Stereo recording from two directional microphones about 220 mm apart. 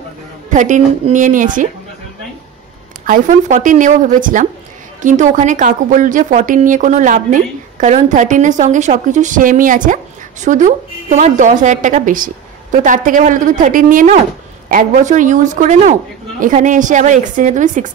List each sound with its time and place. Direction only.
0.5 s a woman's voice: 35° right (ahead or behind)
3.1 s a woman's voice: 35° right (ahead or behind)